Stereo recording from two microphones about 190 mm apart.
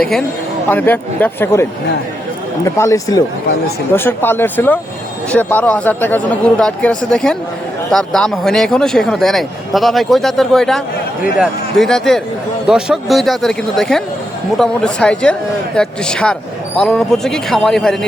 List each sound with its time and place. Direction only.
0.0 s speech: centre (ahead or behind)
2.6 s speech: 15° left (ahead or behind)